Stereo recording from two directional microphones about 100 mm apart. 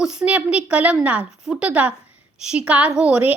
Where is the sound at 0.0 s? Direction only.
5° right (ahead or behind).